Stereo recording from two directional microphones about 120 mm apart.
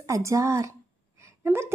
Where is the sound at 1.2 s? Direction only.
20° right (ahead or behind).